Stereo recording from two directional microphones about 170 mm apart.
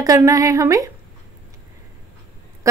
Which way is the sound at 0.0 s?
20° right (ahead or behind).